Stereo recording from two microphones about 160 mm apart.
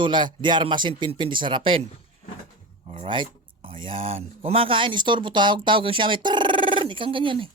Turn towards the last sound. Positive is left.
turn(degrees=-30)  # may be behind; listen again after turning